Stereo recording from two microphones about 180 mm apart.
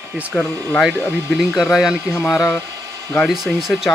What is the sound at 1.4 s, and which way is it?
Speech, 15° left (ahead or behind).